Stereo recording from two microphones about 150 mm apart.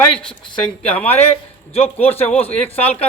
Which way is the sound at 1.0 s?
45° left (ahead or behind).